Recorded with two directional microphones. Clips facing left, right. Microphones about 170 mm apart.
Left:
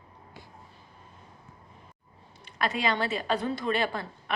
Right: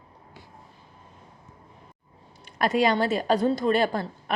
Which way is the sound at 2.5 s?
45° right (ahead or behind).